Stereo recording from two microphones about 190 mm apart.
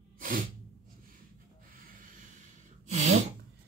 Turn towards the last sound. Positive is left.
turn(degrees=-40)  # may be behind; listen again after turning